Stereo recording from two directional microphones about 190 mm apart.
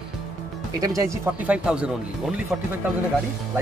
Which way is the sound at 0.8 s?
20° right (ahead or behind).